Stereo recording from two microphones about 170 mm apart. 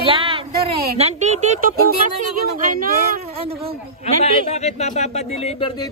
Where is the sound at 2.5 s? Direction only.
55° right (ahead or behind).